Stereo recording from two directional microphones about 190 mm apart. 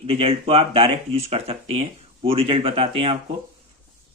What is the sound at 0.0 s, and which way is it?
Speech, 30° right (ahead or behind).